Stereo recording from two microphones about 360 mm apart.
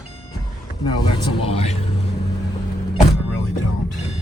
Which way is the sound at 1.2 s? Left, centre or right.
Centre.